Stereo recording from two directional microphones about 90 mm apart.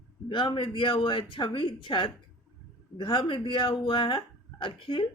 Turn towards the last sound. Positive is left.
turn(degrees=70)  # may be behind; listen again after turning